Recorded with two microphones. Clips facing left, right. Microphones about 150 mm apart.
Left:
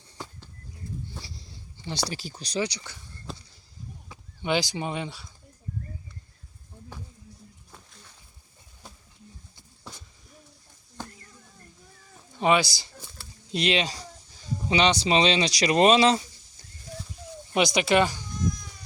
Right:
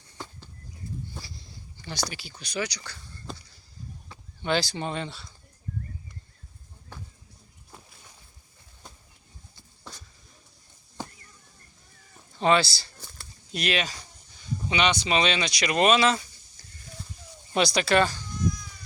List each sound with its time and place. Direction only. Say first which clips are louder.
1.2 s speech: left 1 dB; 30° left (ahead or behind)
4.1 s speech: even; 15° left (ahead or behind)
7.7 s a sound: right 1 dB; 10° right (ahead or behind)
8.8 s a sound: left 1 dB; 5° left (ahead or behind)
12.4 s speech: even; 15° left (ahead or behind)
13.5 s speech: left 3 dB; 25° left (ahead or behind)
17.5 s speech: left 1 dB; 20° left (ahead or behind)